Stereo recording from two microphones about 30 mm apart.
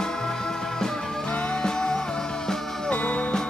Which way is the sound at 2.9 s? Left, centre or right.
Left.